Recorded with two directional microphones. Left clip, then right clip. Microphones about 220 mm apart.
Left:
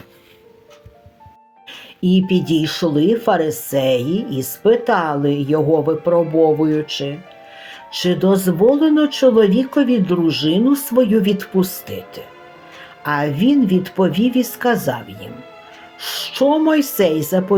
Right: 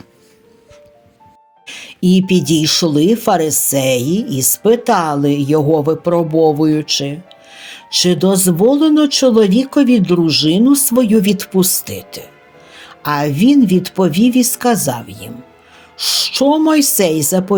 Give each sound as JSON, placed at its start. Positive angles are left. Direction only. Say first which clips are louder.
{"t": 1.6, "sound": "speech", "louder": "right 4 dB", "side_deg": -45}
{"t": 16.4, "sound": "speech", "louder": "right 1 dB", "side_deg": -45}